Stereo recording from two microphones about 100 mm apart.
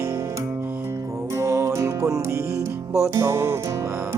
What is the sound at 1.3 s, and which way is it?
Music, 30° right (ahead or behind).